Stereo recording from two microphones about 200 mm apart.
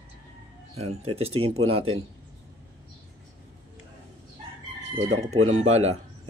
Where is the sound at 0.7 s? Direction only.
30° right (ahead or behind).